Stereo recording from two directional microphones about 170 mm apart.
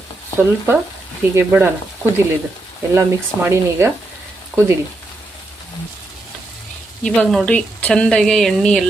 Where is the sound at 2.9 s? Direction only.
15° right (ahead or behind).